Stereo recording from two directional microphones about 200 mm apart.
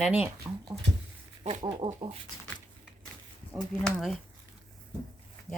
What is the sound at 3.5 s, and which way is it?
Speech, centre (ahead or behind).